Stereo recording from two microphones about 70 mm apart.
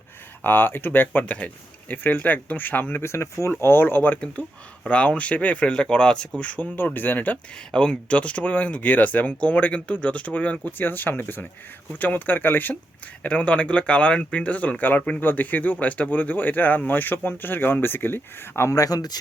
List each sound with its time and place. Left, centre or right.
0.4 s speech: left
3.0 s speech: left
3.5 s speech: left; by 6.2 s centre
6.4 s speech: left
7.7 s speech: centre; by 18.8 s left
18.8 s speech: left